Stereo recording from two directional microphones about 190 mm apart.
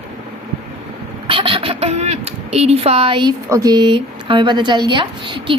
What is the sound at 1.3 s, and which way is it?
Speech, 30° right (ahead or behind).